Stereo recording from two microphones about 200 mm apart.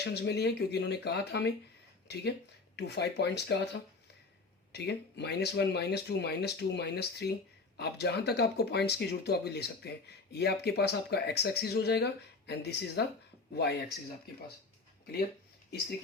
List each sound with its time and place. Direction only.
0.0 s speech: 55° left (ahead or behind)